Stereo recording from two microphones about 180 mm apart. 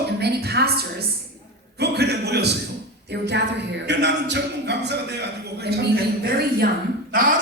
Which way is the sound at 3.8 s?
75° right (ahead or behind).